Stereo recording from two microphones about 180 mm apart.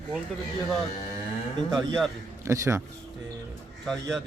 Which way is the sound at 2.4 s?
15° right (ahead or behind).